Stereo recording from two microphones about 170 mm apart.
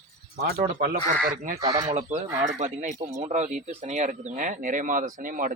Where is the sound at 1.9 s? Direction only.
40° right (ahead or behind).